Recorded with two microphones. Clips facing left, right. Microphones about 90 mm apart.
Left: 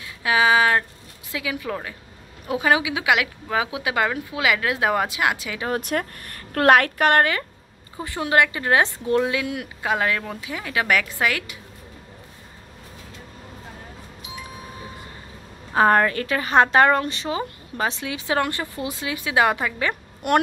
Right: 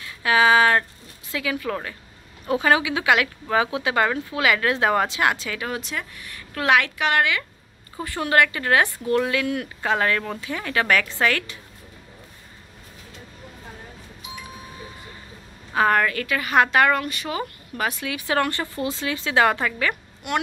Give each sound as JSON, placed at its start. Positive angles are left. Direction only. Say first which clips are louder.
{"t": 0.2, "sound": "speech", "louder": "right 1 dB", "side_deg": 10}
{"t": 5.7, "sound": "a woman's voice", "louder": "left 5 dB", "side_deg": 50}
{"t": 8.0, "sound": "speech", "louder": "even", "side_deg": 20}
{"t": 15.7, "sound": "a woman's voice", "louder": "left 2 dB", "side_deg": 30}
{"t": 20.2, "sound": "a woman's voice", "louder": "left 6 dB", "side_deg": 50}